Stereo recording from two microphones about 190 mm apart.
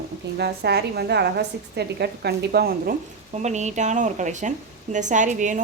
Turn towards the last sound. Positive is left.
turn(degrees=-40)  # may be behind; listen again after turning